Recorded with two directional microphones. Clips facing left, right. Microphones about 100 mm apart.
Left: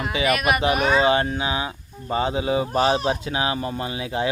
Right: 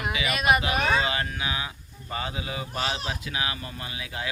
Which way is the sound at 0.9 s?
30° left (ahead or behind).